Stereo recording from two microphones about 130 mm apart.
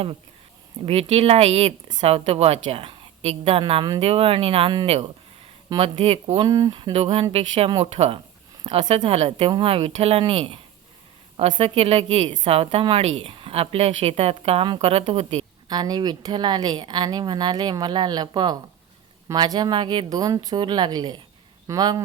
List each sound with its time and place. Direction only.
0.9 s a woman's voice: 55° right (ahead or behind)
3.7 s speech: 35° right (ahead or behind)
4.0 s a woman's voice: 50° right (ahead or behind)
6.4 s speech: 30° right (ahead or behind)
6.9 s a woman's voice: 50° right (ahead or behind)
8.8 s speech: 35° right (ahead or behind)
9.0 s a woman's voice: 55° right (ahead or behind)
15.7 s speech: 30° right (ahead or behind)